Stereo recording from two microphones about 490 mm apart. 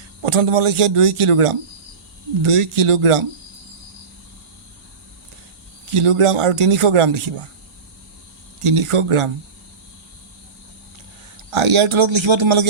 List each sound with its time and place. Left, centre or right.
0.3 s speech: right
5.9 s speech: right
8.6 s speech: right
11.5 s speech: right